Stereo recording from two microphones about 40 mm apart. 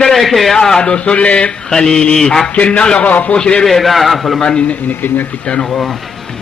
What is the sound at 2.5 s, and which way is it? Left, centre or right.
Speech, left.